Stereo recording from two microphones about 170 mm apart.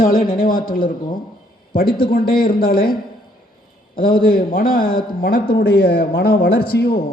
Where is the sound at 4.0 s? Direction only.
60° left (ahead or behind).